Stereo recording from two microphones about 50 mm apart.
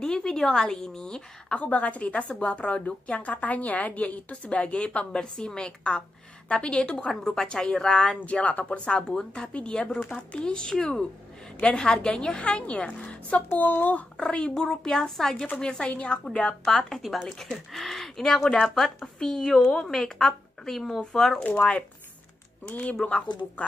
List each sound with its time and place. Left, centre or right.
0.0 s speech: centre
1.6 s a woman's voice: left
13.6 s speech: left
14.1 s a woman's voice: centre
15.5 s a woman's voice: left
16.6 s speech: centre
21.4 s speech: left
23.0 s a woman's voice: left